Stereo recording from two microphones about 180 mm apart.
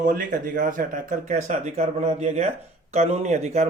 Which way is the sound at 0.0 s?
45° right (ahead or behind).